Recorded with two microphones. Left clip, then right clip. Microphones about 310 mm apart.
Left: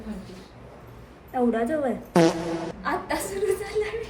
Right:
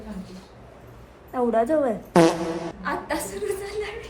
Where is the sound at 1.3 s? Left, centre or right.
Centre.